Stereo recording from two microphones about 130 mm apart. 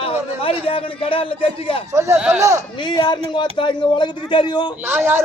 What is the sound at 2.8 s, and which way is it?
A man's voice, 35° left (ahead or behind).